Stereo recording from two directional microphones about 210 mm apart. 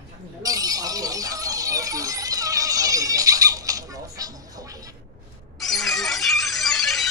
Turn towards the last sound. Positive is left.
turn(degrees=0)  # may be behind; listen again after turning